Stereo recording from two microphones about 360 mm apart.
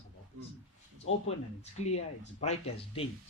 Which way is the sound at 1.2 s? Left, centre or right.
Centre.